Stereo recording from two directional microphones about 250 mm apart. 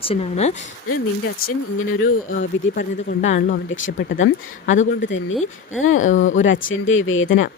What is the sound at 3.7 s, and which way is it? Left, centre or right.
Speech, left.